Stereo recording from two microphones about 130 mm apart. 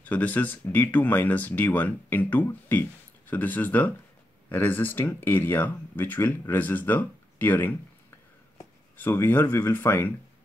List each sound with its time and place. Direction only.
0.0 s speech: 15° left (ahead or behind)
8.9 s speech: 15° left (ahead or behind)